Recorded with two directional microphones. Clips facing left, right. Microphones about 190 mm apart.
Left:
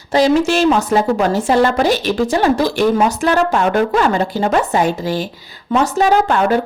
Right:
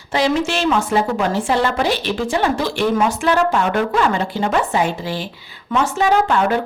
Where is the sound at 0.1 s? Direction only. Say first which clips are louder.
Left 5 dB; 40° left (ahead or behind).